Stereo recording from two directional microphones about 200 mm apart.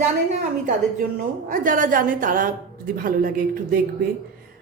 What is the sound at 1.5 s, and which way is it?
A woman's voice, 40° right (ahead or behind).